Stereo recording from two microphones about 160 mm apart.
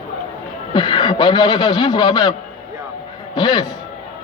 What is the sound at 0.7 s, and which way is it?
A man's voice, 30° left (ahead or behind).